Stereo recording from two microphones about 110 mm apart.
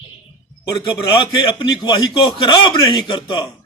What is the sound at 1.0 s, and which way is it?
A man's voice, 45° left (ahead or behind).